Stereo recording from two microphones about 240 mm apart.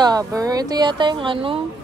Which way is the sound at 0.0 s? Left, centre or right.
Centre.